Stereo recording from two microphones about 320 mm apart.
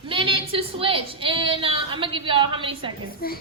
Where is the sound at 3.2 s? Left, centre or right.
Left.